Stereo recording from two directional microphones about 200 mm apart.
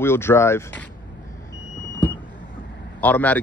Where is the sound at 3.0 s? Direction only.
10° left (ahead or behind).